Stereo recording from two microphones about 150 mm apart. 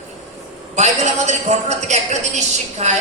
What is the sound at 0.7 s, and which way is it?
A man's voice, 50° right (ahead or behind).